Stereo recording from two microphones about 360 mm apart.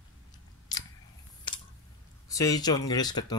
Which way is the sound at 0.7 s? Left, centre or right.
Centre.